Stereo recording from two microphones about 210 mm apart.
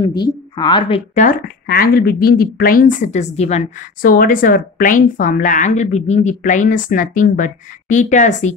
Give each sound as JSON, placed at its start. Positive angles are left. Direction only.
{"t": 0.1, "sound": "a woman's voice", "side_deg": 20}